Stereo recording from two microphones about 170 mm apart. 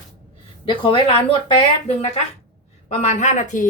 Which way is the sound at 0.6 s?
30° left (ahead or behind).